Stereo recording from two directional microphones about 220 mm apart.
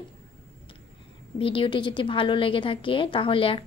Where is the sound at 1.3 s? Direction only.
25° left (ahead or behind).